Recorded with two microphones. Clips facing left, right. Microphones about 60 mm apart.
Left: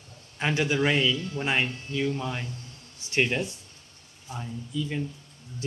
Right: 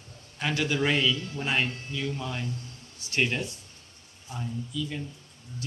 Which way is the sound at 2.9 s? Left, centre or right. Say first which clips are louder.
Left 3 dB; left.